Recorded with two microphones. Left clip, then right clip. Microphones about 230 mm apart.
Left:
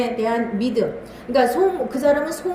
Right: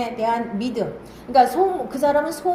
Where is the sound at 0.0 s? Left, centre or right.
Right.